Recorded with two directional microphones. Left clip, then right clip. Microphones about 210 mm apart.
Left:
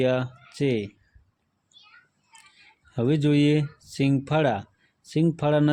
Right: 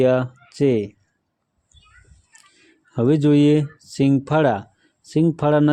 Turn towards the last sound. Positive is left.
turn(degrees=-15)  # may be behind; listen again after turning